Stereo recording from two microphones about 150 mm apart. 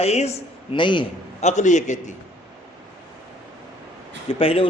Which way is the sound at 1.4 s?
50° left (ahead or behind).